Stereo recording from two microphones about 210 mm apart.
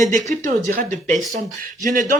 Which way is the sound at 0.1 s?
35° right (ahead or behind).